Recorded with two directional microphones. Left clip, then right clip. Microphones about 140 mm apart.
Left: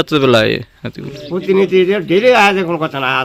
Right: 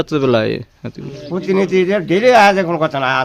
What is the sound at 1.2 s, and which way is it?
A man's voice, 40° right (ahead or behind).